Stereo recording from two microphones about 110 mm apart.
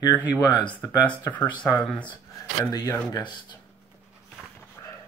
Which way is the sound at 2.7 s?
30° left (ahead or behind).